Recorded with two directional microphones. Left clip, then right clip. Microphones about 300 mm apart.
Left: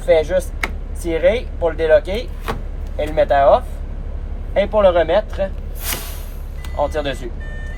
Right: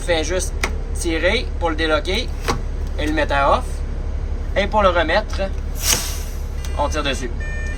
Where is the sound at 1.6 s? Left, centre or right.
Centre.